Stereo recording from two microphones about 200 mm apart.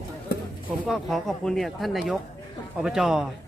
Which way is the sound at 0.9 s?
Centre (ahead or behind).